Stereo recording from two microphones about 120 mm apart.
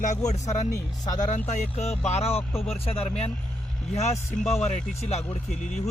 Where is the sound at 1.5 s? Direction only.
75° left (ahead or behind).